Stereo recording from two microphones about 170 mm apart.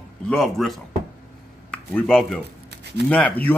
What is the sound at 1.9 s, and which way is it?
Speech, 5° left (ahead or behind).